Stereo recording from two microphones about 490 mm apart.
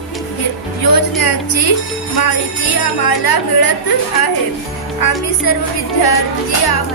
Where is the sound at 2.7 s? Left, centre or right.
Left.